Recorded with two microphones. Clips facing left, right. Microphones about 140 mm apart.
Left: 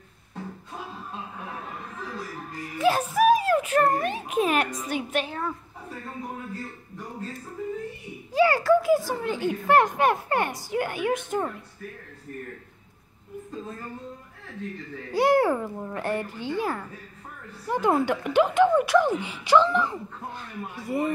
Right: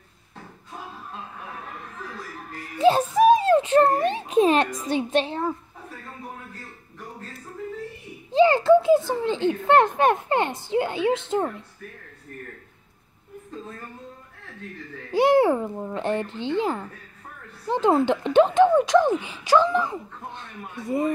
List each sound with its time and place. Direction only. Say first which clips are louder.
2.8 s a child's voice: right 4 dB; 25° right (ahead or behind)
8.3 s speech: right 4 dB; 25° right (ahead or behind)
15.1 s speech: right 3 dB; 20° right (ahead or behind)